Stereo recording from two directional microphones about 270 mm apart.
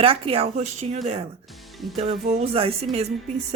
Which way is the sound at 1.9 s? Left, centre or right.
Right.